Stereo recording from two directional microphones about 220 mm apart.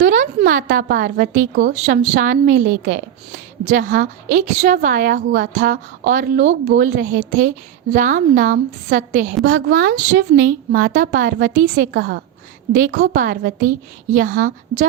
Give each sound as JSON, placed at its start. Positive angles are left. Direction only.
{"t": 0.0, "sound": "a woman's voice", "side_deg": -35}
{"t": 1.7, "sound": "a woman's voice", "side_deg": -30}